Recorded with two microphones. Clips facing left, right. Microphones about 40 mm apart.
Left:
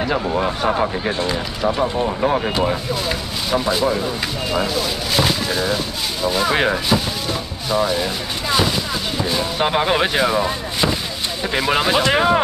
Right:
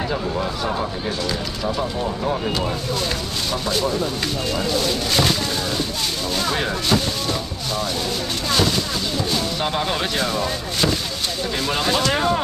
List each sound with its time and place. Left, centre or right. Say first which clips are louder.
0.2 s speech: left 4 dB; left
3.5 s speech: left 5 dB; centre
6.5 s speech: left 6 dB; left
6.9 s speech: left 1 dB; centre
8.5 s a sound: left 2 dB; centre
9.6 s speech: left 5 dB; left